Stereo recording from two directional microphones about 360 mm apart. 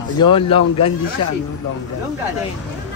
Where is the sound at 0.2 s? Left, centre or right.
Centre.